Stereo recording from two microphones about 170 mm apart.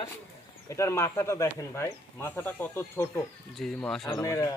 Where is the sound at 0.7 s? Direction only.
15° left (ahead or behind).